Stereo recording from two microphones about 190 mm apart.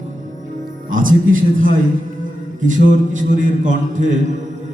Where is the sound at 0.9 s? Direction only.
45° right (ahead or behind).